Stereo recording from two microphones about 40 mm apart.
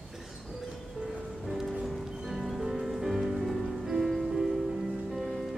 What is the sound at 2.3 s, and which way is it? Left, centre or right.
Music, centre.